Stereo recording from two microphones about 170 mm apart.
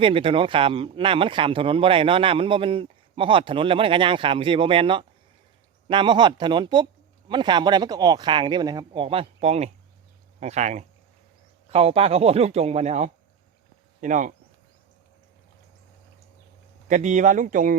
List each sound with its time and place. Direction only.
0.0 s speech: 30° right (ahead or behind); by 14.3 s 50° right (ahead or behind)
16.9 s speech: 45° right (ahead or behind)